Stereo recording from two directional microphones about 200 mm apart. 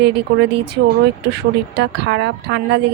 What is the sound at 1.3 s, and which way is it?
Speech, 55° right (ahead or behind).